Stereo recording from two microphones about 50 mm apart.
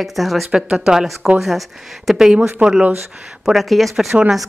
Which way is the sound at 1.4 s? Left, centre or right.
Centre.